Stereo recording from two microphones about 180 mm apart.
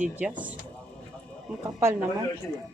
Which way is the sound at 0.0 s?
10° right (ahead or behind).